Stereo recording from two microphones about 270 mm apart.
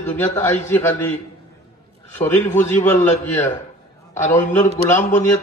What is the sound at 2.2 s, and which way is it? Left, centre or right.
Speech, centre.